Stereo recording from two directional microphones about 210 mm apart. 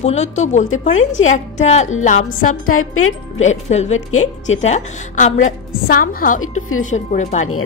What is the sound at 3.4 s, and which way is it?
Speech, 30° left (ahead or behind).